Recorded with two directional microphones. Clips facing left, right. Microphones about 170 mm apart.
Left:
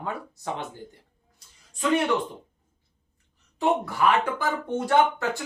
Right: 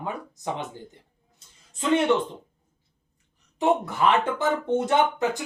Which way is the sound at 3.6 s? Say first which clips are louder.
Right 1 dB; 20° right (ahead or behind).